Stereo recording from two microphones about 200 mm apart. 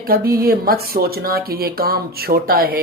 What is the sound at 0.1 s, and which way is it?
Speech, 50° right (ahead or behind).